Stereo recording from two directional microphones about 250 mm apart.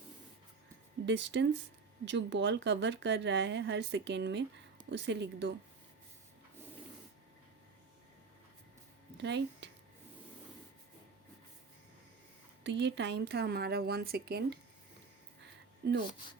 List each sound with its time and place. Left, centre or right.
1.0 s a woman's voice: right
9.1 s speech: right
12.6 s speech: right
15.8 s a woman's voice: right